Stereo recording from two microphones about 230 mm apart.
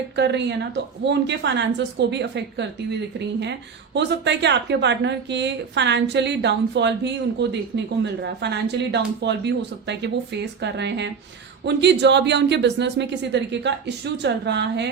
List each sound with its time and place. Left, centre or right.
0.2 s a woman's voice: right
3.9 s a woman's voice: right